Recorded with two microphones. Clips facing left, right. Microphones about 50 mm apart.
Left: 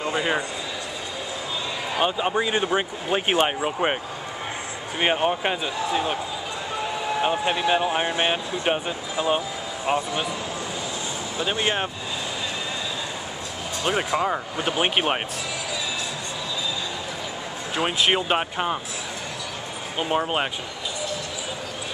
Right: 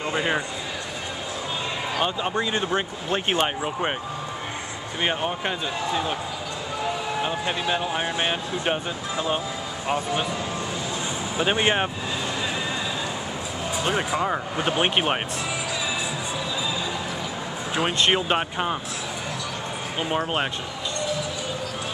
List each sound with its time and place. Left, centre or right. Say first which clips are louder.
0.0 s speech: even; centre
2.0 s speech: left 3 dB; centre
5.0 s speech: left 4 dB; centre
7.2 s speech: left 3 dB; left
11.3 s speech: right 3 dB; right
13.8 s speech: left 2 dB; centre
17.7 s speech: even; centre
20.0 s speech: left 2 dB; centre